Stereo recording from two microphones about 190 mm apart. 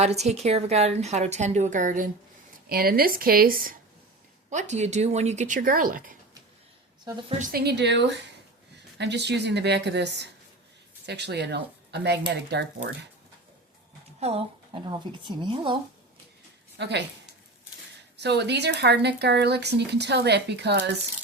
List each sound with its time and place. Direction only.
0.0 s a woman's voice: 35° right (ahead or behind)
4.4 s a woman's voice: 40° right (ahead or behind)
7.3 s speech: 45° right (ahead or behind)
7.6 s speech: 65° right (ahead or behind)
14.2 s speech: 30° right (ahead or behind)
16.7 s a woman's voice: 65° right (ahead or behind)
18.2 s speech: 60° right (ahead or behind)